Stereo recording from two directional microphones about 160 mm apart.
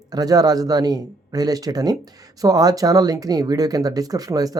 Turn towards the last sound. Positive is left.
turn(degrees=-20)  # may be behind; listen again after turning